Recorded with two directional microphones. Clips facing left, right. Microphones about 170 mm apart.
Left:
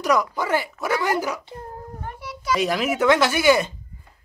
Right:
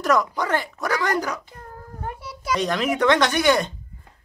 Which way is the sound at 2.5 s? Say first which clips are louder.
Left 1 dB; 5° left (ahead or behind).